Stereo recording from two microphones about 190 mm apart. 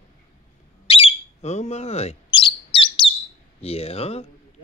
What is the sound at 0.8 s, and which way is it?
Bird, 30° left (ahead or behind).